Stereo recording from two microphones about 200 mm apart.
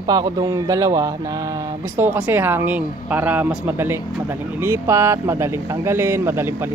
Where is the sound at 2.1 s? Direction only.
10° right (ahead or behind).